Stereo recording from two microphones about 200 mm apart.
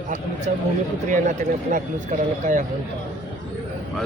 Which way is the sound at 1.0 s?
40° right (ahead or behind).